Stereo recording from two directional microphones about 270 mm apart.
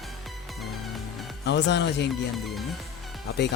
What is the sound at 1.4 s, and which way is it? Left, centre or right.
Speech, left.